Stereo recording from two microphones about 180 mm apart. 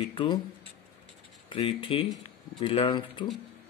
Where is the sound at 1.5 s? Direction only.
30° left (ahead or behind).